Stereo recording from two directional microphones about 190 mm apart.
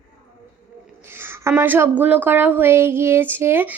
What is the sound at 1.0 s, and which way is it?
A woman's voice, 10° right (ahead or behind).